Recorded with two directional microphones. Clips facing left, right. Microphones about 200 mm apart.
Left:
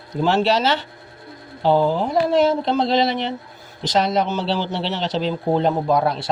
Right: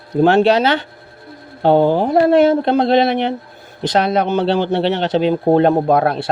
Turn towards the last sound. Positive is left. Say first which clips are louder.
# right 4 dB
turn(degrees=-60)  # may be behind; listen again after turning